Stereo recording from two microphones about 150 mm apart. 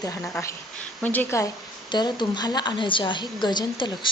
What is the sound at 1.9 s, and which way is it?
A woman's voice, 30° left (ahead or behind).